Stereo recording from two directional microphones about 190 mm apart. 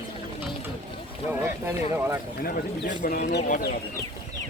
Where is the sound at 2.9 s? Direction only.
45° left (ahead or behind).